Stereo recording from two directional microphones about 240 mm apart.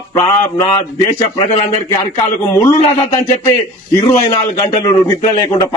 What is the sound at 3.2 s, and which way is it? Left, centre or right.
Speech, left.